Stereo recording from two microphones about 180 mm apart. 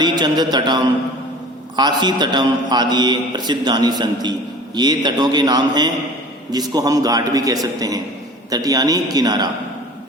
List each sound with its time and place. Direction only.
0.0 s a man's voice: 25° right (ahead or behind)